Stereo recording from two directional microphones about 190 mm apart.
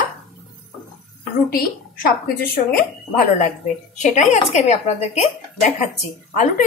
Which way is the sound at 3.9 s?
40° left (ahead or behind).